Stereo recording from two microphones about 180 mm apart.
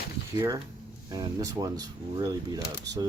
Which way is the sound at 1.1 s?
20° right (ahead or behind).